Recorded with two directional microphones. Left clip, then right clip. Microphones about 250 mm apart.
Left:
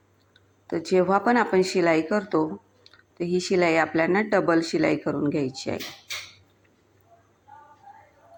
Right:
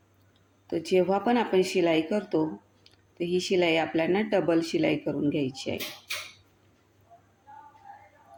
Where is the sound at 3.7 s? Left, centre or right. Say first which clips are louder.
Left 4 dB; left.